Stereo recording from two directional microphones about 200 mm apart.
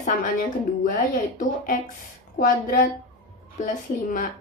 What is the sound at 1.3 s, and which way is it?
A woman's voice, 40° left (ahead or behind).